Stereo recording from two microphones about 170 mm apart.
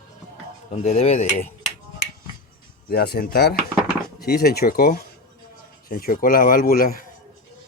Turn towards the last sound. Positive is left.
turn(degrees=60)  # may be behind; listen again after turning